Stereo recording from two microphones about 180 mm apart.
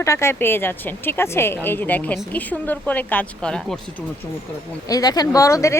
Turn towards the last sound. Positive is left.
turn(degrees=15)  # may be behind; listen again after turning